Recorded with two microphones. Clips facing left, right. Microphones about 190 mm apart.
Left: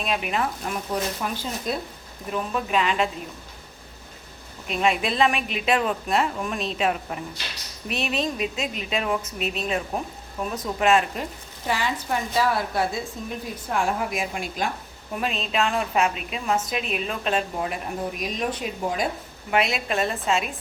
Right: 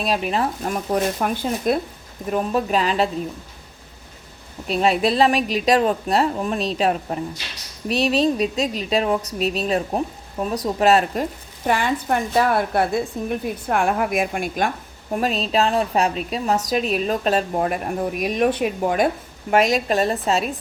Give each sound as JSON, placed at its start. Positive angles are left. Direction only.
{"t": 0.0, "sound": "a woman's voice", "side_deg": -35}
{"t": 0.9, "sound": "a woman's voice", "side_deg": -55}
{"t": 2.3, "sound": "a woman's voice", "side_deg": -40}
{"t": 4.7, "sound": "a woman's voice", "side_deg": -35}
{"t": 11.6, "sound": "a woman's voice", "side_deg": -55}
{"t": 15.1, "sound": "a woman's voice", "side_deg": -40}
{"t": 19.5, "sound": "a woman's voice", "side_deg": -40}